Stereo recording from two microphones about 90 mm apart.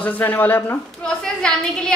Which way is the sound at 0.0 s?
20° left (ahead or behind).